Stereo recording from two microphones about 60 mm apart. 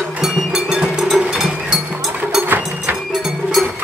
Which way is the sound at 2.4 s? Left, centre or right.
Right.